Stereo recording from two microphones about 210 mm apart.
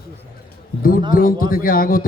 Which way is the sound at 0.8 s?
40° left (ahead or behind).